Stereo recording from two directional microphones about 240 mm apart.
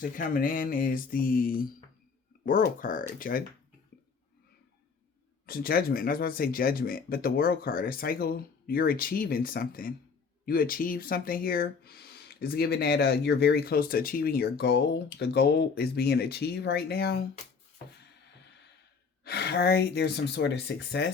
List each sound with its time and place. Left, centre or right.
0.0 s speech: left
5.5 s speech: left
19.2 s speech: left